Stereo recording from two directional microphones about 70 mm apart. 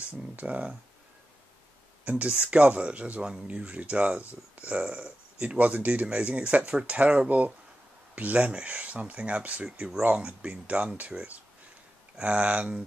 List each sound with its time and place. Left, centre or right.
0.2 s speech: centre
2.0 s speech: centre